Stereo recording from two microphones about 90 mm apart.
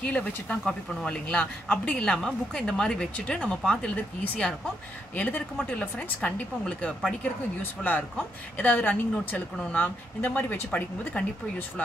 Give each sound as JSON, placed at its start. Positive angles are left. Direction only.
{"t": 0.0, "sound": "speech", "side_deg": 15}